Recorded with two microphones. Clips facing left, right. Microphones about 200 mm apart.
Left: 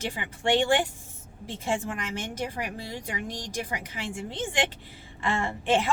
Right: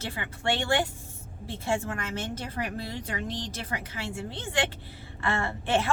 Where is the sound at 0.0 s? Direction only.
15° left (ahead or behind).